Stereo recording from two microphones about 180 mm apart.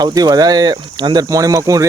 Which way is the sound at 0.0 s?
20° right (ahead or behind).